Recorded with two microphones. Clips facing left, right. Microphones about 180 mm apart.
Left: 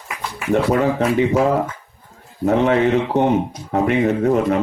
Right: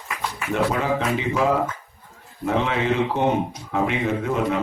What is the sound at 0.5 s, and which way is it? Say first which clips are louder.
Speech: left 6 dB; 40° left (ahead or behind).